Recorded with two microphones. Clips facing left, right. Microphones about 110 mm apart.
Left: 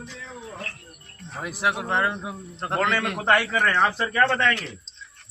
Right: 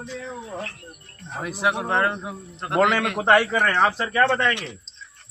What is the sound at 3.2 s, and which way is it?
Speech, 25° right (ahead or behind).